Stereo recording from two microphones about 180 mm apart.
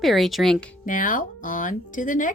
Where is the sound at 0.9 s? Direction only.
50° left (ahead or behind).